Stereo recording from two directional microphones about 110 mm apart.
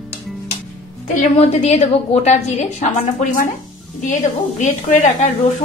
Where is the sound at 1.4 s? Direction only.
70° left (ahead or behind); by 3.3 s 90° left.